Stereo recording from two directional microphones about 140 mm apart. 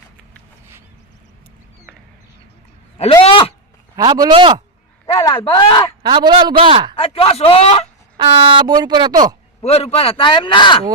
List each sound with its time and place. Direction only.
3.1 s a sound: 40° left (ahead or behind)
3.9 s a man's voice: 25° right (ahead or behind)
5.1 s speech: 35° left (ahead or behind)
6.0 s speech: 30° right (ahead or behind)
6.9 s speech: 40° left (ahead or behind)
8.1 s speech: 35° right (ahead or behind)
9.6 s speech: 45° left (ahead or behind)